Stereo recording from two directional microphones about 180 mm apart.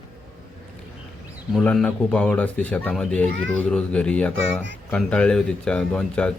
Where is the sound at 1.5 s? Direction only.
5° left (ahead or behind).